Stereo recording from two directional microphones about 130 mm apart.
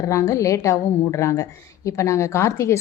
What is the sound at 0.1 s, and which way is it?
A woman's voice, 25° left (ahead or behind).